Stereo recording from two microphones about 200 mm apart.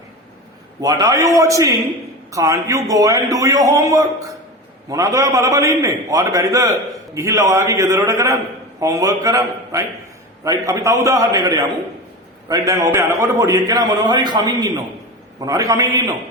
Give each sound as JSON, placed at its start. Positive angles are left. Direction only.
{"t": 0.8, "sound": "a man's voice", "side_deg": -20}